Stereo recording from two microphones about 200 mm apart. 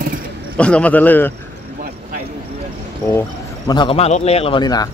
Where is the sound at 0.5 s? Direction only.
5° left (ahead or behind).